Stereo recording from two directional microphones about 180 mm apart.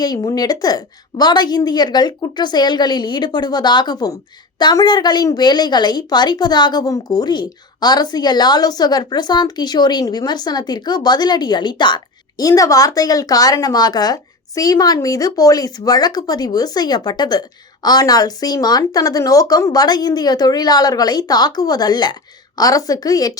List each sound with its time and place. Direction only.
0.0 s a woman's voice: 20° left (ahead or behind)